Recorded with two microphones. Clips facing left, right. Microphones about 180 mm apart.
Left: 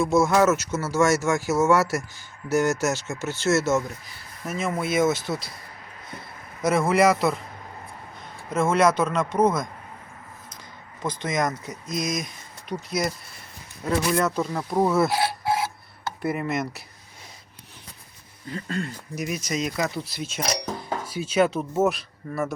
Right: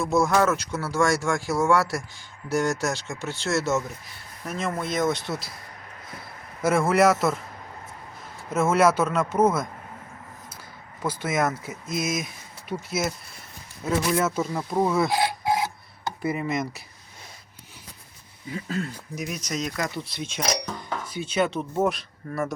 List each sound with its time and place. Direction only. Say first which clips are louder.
0.0 s speech: left 2 dB; centre (ahead or behind)
8.4 s speech: even; 5° right (ahead or behind)
11.0 s speech: right 1 dB; 5° right (ahead or behind)
15.1 s filing: even; 15° right (ahead or behind)
16.2 s speech: left 1 dB; centre (ahead or behind)
18.4 s speech: even; 5° right (ahead or behind)